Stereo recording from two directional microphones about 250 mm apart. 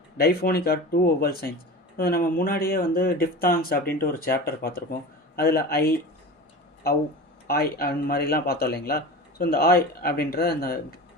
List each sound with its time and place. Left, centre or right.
0.2 s speech: left
7.4 s speech: left